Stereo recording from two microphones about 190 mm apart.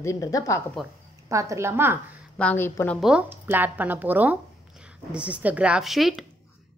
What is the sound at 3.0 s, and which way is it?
A woman's voice, 10° right (ahead or behind).